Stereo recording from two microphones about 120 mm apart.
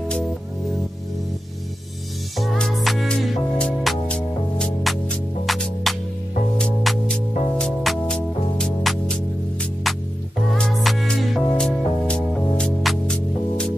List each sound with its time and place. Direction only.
2.3 s music: centre (ahead or behind)
10.5 s music: centre (ahead or behind)